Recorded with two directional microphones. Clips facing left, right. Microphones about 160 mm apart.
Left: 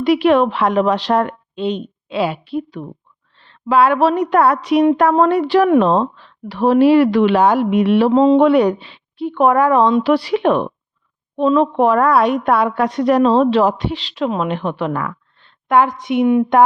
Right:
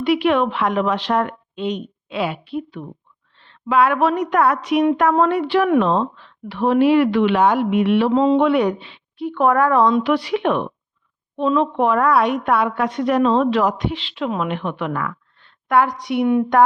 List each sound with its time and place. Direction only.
0.0 s a woman's voice: 40° left (ahead or behind)
9.3 s speech: 20° left (ahead or behind)
10.0 s a woman's voice: 35° left (ahead or behind)